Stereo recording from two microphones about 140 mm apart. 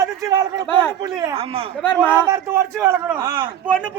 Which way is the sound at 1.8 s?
10° left (ahead or behind).